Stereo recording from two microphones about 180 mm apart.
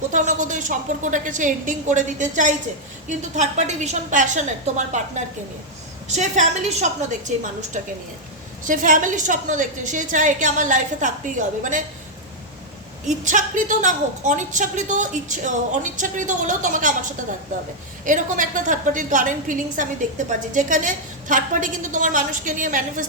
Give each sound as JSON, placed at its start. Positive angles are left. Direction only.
{"t": 0.1, "sound": "a woman's voice", "side_deg": -45}
{"t": 8.6, "sound": "a woman's voice", "side_deg": -45}
{"t": 13.1, "sound": "a woman's voice", "side_deg": -45}
{"t": 18.0, "sound": "a woman's voice", "side_deg": -45}